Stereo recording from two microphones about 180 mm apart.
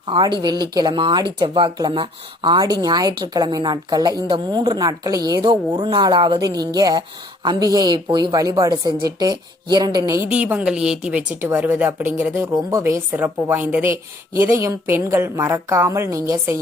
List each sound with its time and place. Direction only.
0.1 s speech: 25° right (ahead or behind)
10.3 s a woman's voice: 5° right (ahead or behind)